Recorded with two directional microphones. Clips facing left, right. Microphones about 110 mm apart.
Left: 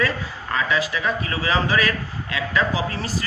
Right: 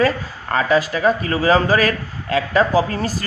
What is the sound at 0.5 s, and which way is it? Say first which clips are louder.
A man's voice: right 6 dB; 40° right (ahead or behind).